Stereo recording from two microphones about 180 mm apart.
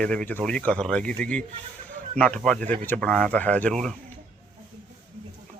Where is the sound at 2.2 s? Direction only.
5° left (ahead or behind).